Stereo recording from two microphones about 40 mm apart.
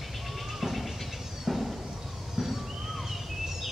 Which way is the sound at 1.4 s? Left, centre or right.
Centre.